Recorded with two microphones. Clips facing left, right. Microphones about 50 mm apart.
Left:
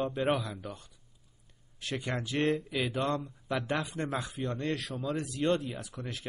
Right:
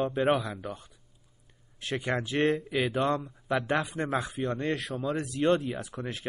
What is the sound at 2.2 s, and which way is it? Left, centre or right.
A man's voice, centre.